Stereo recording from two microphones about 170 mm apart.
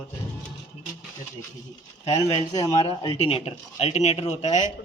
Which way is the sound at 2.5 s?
25° left (ahead or behind).